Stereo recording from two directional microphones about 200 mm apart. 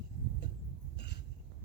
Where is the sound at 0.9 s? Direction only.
55° left (ahead or behind).